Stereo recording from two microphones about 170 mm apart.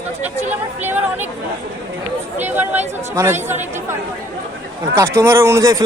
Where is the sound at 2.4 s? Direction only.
10° right (ahead or behind).